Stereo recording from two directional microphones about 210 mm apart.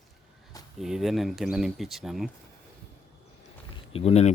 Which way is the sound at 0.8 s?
Centre (ahead or behind).